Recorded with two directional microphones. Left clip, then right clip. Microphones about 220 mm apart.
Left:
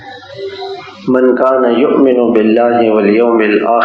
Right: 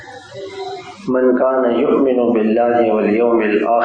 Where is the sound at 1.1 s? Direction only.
40° left (ahead or behind).